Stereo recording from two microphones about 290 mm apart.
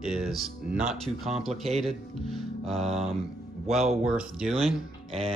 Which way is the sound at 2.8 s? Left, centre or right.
Centre.